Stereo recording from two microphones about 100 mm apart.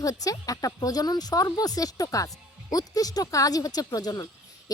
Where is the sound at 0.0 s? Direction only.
35° left (ahead or behind).